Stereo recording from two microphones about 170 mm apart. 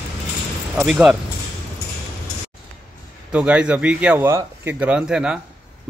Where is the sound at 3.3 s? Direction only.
5° right (ahead or behind).